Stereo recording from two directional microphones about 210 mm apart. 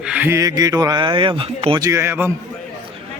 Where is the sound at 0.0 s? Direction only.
5° right (ahead or behind).